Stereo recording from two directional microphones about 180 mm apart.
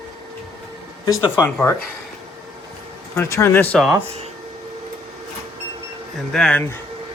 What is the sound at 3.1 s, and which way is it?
Speech, 15° left (ahead or behind).